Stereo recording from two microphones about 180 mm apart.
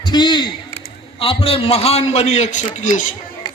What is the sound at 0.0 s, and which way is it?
A man's voice, 25° left (ahead or behind).